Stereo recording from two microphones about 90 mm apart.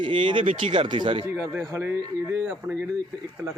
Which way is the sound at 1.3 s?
25° right (ahead or behind).